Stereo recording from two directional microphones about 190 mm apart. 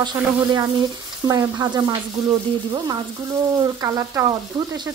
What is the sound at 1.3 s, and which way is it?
Speech, 15° right (ahead or behind).